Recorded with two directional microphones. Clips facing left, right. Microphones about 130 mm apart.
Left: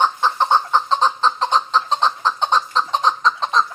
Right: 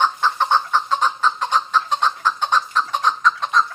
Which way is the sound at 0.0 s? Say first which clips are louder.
Left 1 dB; 20° left (ahead or behind).